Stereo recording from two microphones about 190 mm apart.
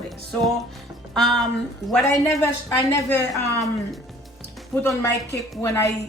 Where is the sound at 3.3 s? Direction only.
Centre (ahead or behind).